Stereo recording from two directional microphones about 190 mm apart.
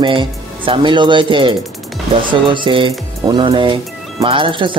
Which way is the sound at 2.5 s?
25° right (ahead or behind).